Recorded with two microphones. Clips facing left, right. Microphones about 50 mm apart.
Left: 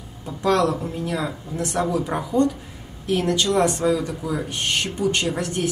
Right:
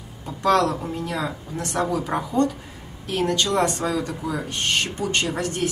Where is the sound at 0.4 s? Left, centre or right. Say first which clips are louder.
Even; centre.